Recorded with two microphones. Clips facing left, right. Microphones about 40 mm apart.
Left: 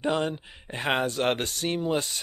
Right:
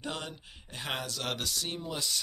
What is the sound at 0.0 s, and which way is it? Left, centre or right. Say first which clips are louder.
Speech: left 12 dB; left.